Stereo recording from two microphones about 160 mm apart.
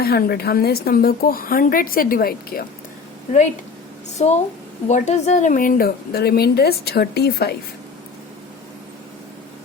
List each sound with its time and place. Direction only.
0.0 s a woman's voice: 75° left (ahead or behind)
4.2 s a woman's voice: 45° left (ahead or behind); by 7.5 s 85° left